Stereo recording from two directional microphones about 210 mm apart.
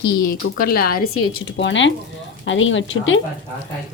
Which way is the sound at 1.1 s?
80° left.